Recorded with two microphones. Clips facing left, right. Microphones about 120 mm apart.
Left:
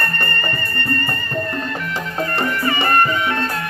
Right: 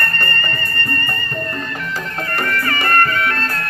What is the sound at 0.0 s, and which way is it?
Music, 10° left (ahead or behind).